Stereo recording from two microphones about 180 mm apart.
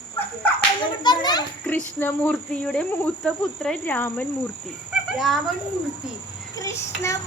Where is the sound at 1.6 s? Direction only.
10° left (ahead or behind).